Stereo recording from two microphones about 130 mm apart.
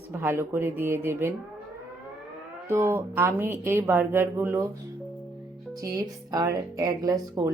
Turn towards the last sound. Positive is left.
turn(degrees=-25)  # may be behind; listen again after turning